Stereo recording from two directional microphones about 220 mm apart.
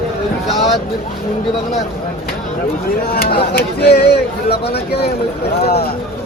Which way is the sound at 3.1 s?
45° left (ahead or behind).